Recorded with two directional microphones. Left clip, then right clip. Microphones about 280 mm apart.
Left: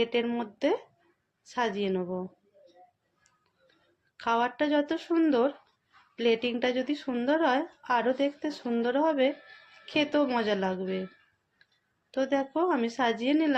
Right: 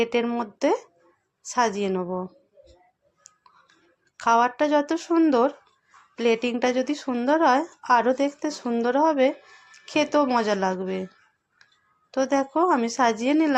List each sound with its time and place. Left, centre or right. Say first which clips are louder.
0.0 s speech: right 4 dB; centre
4.2 s speech: right 7 dB; centre
12.1 s speech: right 5 dB; centre